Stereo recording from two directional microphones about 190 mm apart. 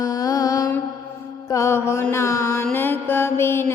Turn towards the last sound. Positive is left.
turn(degrees=10)  # may be behind; listen again after turning